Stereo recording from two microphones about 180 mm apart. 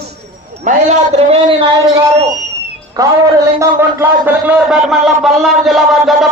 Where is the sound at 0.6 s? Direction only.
40° right (ahead or behind).